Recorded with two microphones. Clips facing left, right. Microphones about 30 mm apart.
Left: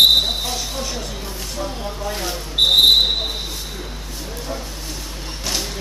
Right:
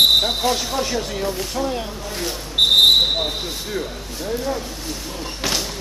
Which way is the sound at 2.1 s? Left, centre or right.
Centre.